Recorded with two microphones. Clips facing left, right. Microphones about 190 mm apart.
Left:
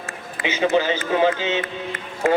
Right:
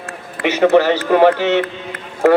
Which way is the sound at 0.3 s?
65° right (ahead or behind).